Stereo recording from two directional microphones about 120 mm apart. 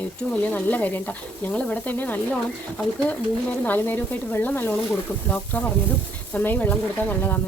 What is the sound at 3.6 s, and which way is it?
Speech, 15° left (ahead or behind).